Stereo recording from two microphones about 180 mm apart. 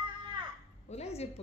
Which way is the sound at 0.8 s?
35° left (ahead or behind).